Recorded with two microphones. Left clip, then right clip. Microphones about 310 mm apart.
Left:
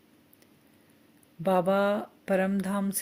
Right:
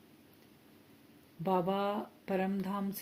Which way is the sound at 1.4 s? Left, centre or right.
Left.